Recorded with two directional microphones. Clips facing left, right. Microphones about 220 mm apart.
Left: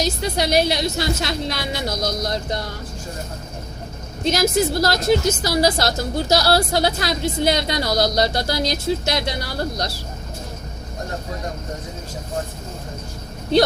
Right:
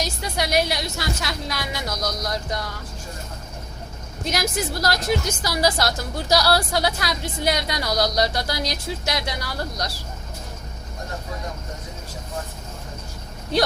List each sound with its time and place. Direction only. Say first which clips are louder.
0.0 s a woman's voice: left 5 dB; 25° left (ahead or behind)
4.2 s a woman's voice: left 7 dB; 25° left (ahead or behind)